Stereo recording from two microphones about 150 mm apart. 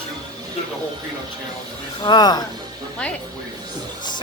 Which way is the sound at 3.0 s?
5° left (ahead or behind).